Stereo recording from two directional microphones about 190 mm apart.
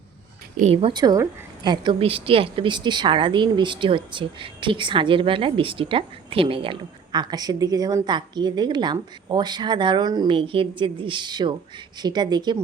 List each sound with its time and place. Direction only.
0.5 s a woman's voice: 35° right (ahead or behind)